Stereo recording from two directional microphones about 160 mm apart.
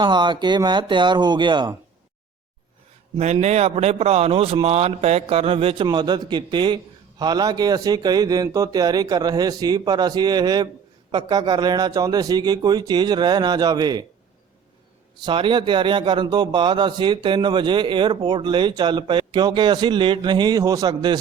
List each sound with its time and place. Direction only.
0.0 s a man's voice: 30° right (ahead or behind)
3.2 s a man's voice: 45° right (ahead or behind); by 14.0 s 25° right (ahead or behind)
15.2 s a man's voice: 30° right (ahead or behind)